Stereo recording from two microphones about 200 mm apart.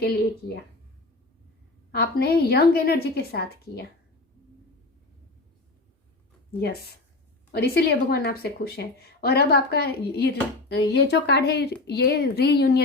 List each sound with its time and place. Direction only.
0.0 s speech: 50° left (ahead or behind)
1.9 s speech: 50° left (ahead or behind)
7.5 s a woman's voice: 50° left (ahead or behind)